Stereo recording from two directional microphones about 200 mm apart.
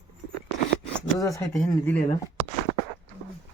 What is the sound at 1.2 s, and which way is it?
Speech, 15° left (ahead or behind).